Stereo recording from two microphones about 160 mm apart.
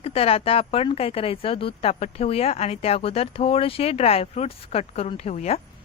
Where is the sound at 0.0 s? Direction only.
40° left (ahead or behind).